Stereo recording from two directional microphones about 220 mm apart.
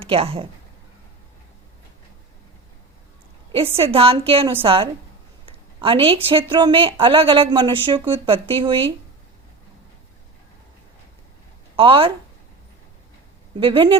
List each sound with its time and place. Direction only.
0.1 s speech: 25° right (ahead or behind)
3.8 s speech: 25° right (ahead or behind)
11.8 s speech: 25° right (ahead or behind)
13.6 s speech: 25° right (ahead or behind)